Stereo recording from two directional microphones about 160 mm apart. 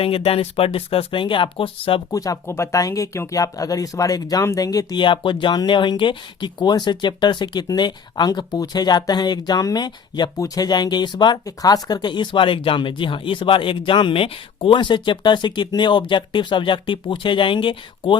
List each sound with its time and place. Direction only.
0.0 s speech: 35° left (ahead or behind)
2.1 s speech: 20° left (ahead or behind)